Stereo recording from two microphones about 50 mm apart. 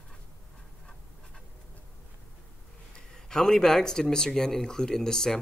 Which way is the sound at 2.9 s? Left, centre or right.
Centre.